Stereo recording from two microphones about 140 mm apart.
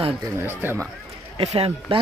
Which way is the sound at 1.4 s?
45° right (ahead or behind).